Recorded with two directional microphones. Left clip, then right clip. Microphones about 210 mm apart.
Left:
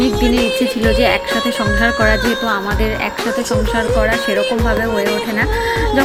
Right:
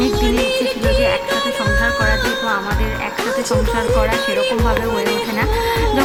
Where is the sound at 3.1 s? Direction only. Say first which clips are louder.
Left 1 dB; centre (ahead or behind).